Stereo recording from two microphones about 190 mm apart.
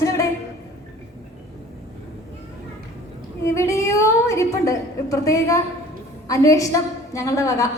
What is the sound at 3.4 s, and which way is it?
A woman's voice, 15° left (ahead or behind).